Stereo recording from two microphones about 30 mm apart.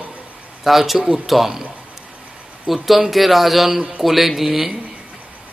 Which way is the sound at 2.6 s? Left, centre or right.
Centre.